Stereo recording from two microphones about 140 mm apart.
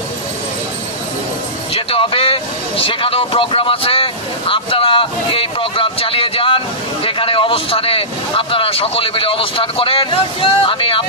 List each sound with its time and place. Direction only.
1.7 s vehicle: 40° left (ahead or behind)